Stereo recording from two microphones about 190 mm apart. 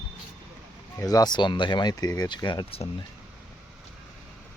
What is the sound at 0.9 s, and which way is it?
Speech, 20° left (ahead or behind).